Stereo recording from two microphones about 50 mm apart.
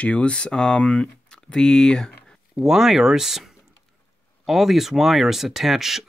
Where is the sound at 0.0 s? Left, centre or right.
Left.